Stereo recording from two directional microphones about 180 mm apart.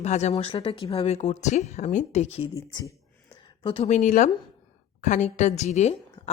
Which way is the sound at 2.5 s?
20° left (ahead or behind).